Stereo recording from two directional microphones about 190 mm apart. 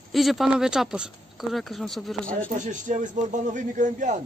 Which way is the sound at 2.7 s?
40° right (ahead or behind).